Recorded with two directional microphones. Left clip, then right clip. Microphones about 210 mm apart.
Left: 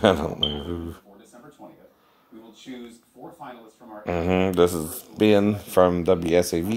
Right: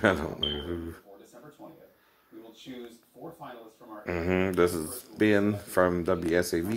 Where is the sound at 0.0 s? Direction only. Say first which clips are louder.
Left 6 dB; 40° left (ahead or behind).